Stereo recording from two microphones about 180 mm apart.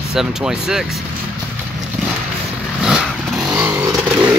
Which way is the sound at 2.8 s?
5° right (ahead or behind).